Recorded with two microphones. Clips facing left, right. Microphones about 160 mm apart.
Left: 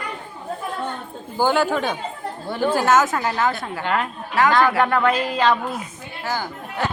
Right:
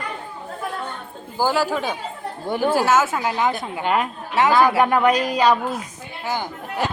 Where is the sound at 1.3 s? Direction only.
5° right (ahead or behind).